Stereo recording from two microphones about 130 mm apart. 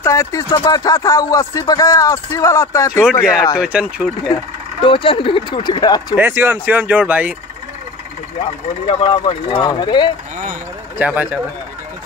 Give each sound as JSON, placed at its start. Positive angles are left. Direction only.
{"t": 0.0, "sound": "speech", "side_deg": 20}
{"t": 3.0, "sound": "speech", "side_deg": -5}
{"t": 4.8, "sound": "speech", "side_deg": 40}
{"t": 6.1, "sound": "speech", "side_deg": -20}
{"t": 8.8, "sound": "speech", "side_deg": 35}
{"t": 11.0, "sound": "speech", "side_deg": -10}